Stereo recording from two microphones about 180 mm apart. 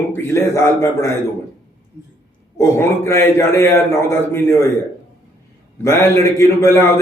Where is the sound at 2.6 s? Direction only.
15° left (ahead or behind).